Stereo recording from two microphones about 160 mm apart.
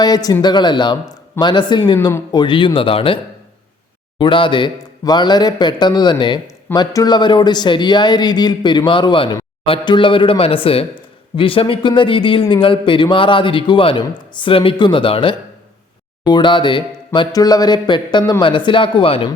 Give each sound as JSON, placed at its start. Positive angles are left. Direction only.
{"t": 0.0, "sound": "speech", "side_deg": 25}
{"t": 4.2, "sound": "speech", "side_deg": 30}